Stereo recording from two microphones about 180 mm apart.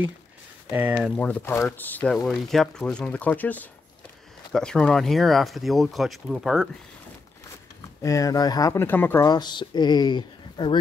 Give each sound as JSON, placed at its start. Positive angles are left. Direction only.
{"t": 0.7, "sound": "speech", "side_deg": -10}
{"t": 1.1, "sound": "speech", "side_deg": 5}
{"t": 8.0, "sound": "speech", "side_deg": 20}
{"t": 9.3, "sound": "speech", "side_deg": 25}